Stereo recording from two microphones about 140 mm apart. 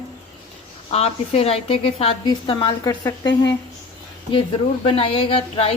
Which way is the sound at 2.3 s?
30° left (ahead or behind).